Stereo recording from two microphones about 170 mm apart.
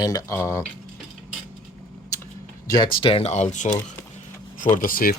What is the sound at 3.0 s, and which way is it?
Speech, 35° left (ahead or behind).